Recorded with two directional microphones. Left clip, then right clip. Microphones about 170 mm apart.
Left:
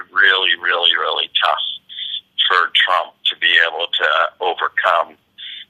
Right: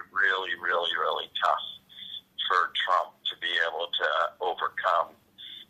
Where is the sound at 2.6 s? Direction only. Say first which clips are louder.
Left 11 dB; 25° left (ahead or behind).